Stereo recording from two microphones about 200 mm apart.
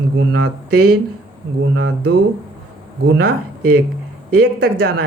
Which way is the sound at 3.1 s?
50° right (ahead or behind).